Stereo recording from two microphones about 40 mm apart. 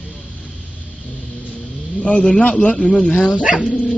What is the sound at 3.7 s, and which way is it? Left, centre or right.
Dog, left.